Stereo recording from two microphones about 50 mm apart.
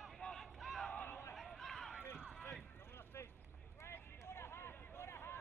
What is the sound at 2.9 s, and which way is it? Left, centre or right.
Vehicle, left.